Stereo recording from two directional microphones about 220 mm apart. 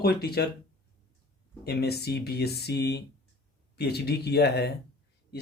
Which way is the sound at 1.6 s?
45° left (ahead or behind).